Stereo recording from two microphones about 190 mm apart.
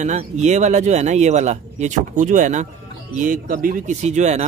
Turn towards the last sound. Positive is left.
turn(degrees=-35)  # may be behind; listen again after turning